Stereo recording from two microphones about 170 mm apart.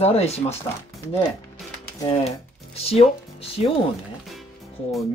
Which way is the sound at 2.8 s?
35° left (ahead or behind).